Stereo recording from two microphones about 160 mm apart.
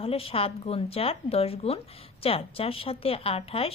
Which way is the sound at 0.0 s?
35° left (ahead or behind).